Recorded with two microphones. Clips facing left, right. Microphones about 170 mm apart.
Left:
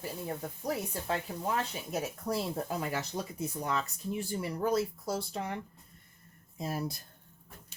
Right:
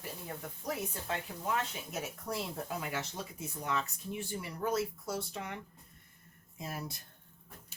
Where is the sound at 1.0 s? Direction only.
35° left (ahead or behind).